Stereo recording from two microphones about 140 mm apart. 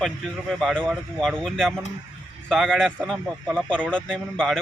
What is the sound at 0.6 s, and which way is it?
Speech, centre (ahead or behind).